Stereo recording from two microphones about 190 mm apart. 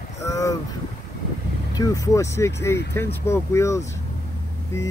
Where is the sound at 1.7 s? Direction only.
20° left (ahead or behind).